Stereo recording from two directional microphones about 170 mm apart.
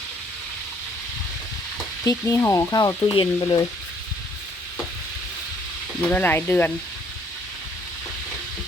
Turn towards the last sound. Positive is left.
turn(degrees=10)  # may be behind; listen again after turning